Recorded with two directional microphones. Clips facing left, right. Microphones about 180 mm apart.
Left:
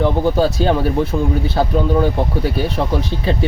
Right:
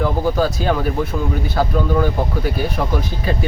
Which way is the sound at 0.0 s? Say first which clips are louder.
Left 3 dB; 30° left (ahead or behind).